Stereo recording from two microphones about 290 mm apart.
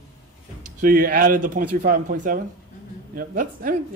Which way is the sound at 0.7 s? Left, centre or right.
Right.